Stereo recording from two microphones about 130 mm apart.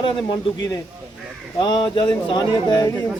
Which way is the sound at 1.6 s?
35° left (ahead or behind).